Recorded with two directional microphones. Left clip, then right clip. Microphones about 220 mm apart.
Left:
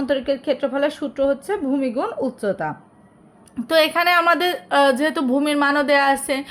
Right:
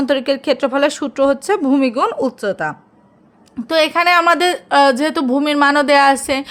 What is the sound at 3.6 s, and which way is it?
A woman's voice, 15° right (ahead or behind).